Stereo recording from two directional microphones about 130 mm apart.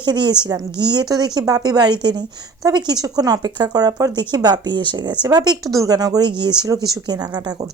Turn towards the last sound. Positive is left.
turn(degrees=-35)  # may be behind; listen again after turning